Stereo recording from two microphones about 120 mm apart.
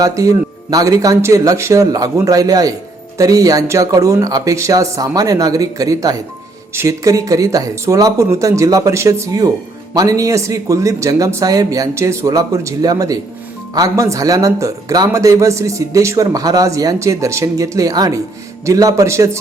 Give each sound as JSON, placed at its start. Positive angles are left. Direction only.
{"t": 0.0, "sound": "speech", "side_deg": -30}